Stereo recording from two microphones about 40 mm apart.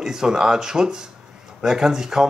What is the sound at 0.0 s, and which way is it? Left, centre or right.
Speech, centre.